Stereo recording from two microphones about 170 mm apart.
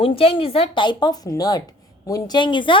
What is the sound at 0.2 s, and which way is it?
A woman's voice, 35° left (ahead or behind).